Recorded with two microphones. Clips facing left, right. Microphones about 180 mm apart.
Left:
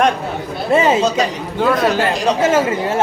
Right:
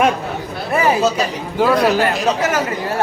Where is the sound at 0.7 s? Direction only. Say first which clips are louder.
Left 3 dB; 25° left (ahead or behind).